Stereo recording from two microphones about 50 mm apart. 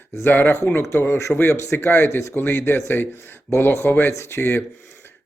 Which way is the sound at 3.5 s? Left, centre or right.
Left.